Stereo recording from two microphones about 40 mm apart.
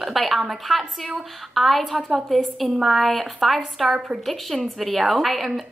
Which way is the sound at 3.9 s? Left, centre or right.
Right.